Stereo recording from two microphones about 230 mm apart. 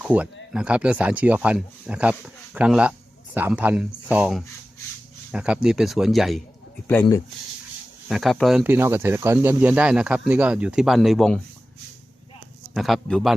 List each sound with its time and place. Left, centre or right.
0.0 s speech: centre
8.0 s speech: centre
12.7 s speech: centre